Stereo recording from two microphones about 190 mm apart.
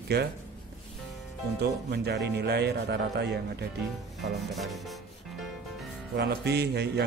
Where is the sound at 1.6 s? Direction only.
60° right (ahead or behind).